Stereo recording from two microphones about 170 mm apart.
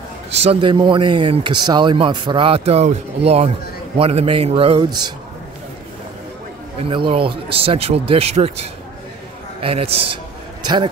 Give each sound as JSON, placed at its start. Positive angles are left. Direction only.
{"t": 0.3, "sound": "speech", "side_deg": -35}
{"t": 6.8, "sound": "speech", "side_deg": -30}